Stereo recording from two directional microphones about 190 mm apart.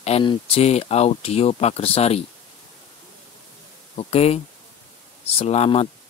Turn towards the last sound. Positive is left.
turn(degrees=35)  # may be behind; listen again after turning